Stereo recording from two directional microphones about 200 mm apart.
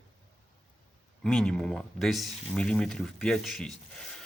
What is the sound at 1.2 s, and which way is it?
A man's voice, centre (ahead or behind).